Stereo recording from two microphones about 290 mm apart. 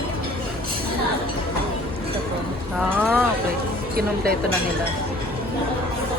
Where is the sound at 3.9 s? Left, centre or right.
Right.